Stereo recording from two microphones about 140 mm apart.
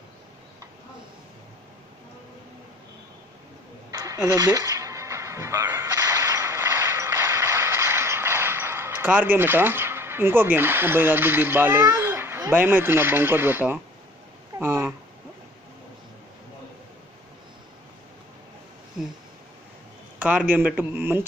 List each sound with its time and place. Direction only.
3.9 s music: 25° right (ahead or behind)
14.6 s a man's voice: 15° right (ahead or behind)
20.2 s a man's voice: 10° right (ahead or behind)